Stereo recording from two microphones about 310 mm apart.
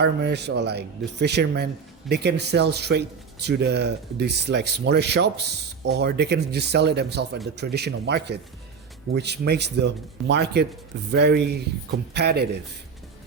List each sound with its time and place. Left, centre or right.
0.0 s a man's voice: right